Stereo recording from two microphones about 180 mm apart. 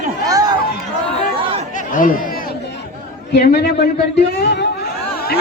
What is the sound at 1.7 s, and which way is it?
Chatter, 45° left (ahead or behind).